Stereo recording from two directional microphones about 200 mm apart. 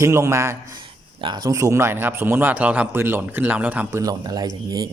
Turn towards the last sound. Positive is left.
turn(degrees=-20)  # may be behind; listen again after turning